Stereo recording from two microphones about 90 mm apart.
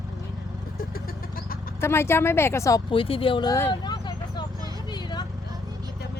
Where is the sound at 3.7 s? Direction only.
55° left (ahead or behind).